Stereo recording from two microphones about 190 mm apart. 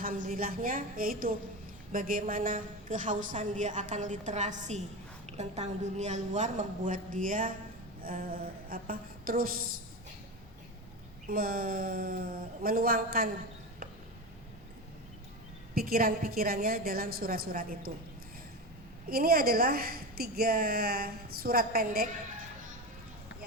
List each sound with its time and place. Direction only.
0.0 s a woman's voice: 45° right (ahead or behind)
11.3 s a woman's voice: 50° right (ahead or behind)
15.7 s a woman's voice: 50° right (ahead or behind)
19.0 s a woman's voice: 50° right (ahead or behind)